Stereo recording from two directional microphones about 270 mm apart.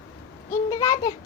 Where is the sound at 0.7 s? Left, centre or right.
Centre.